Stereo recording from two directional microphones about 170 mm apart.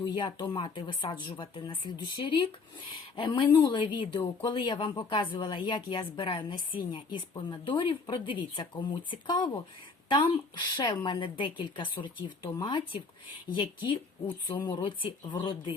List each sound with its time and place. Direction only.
0.0 s a woman's voice: 25° left (ahead or behind)